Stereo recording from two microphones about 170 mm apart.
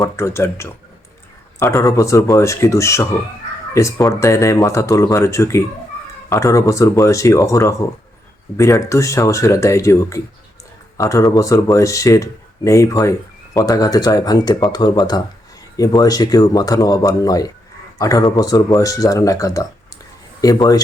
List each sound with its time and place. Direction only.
0.0 s speech: 15° left (ahead or behind)